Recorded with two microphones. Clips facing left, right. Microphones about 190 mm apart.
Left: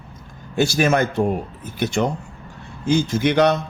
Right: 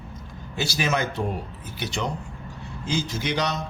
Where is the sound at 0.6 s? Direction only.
50° left (ahead or behind).